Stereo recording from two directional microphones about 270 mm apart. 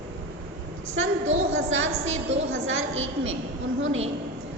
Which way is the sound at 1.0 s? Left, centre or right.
Right.